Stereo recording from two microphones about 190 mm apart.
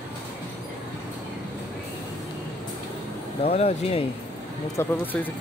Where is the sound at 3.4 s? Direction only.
35° left (ahead or behind).